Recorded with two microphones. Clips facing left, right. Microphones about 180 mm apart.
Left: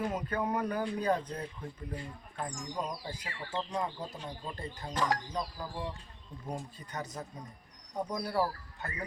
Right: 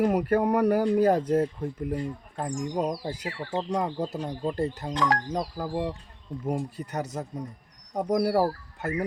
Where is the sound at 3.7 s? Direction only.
80° right.